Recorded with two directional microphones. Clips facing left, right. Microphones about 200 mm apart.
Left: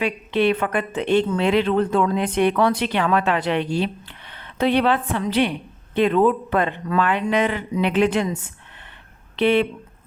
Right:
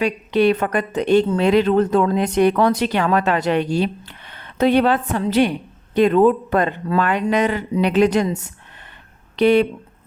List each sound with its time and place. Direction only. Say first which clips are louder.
0.0 s speech: right 3 dB; 40° right (ahead or behind)